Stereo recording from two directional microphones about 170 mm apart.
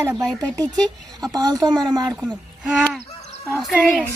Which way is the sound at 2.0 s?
5° right (ahead or behind).